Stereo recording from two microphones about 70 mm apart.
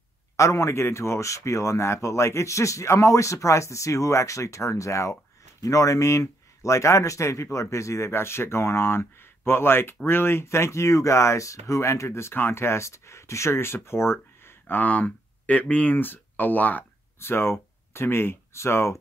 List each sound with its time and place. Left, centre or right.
0.4 s speech: left
17.2 s speech: left